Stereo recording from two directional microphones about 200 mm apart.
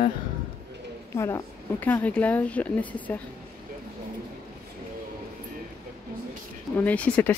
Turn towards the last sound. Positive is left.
turn(degrees=5)  # may be behind; listen again after turning